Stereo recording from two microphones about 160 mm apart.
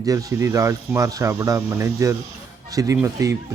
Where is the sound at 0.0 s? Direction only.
20° right (ahead or behind).